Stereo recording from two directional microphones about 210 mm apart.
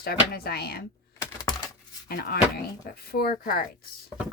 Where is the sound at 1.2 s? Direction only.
20° left (ahead or behind).